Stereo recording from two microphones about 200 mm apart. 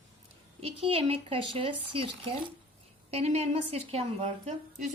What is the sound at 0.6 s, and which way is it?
A woman's voice, 30° right (ahead or behind).